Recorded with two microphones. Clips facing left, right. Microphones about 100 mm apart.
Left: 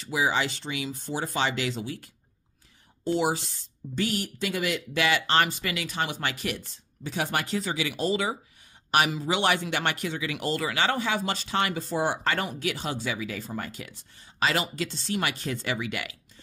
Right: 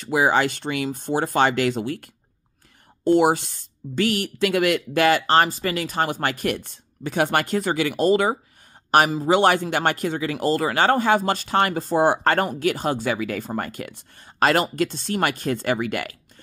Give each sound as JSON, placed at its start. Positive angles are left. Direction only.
{"t": 0.0, "sound": "speech", "side_deg": -55}
{"t": 3.9, "sound": "a man's voice", "side_deg": -80}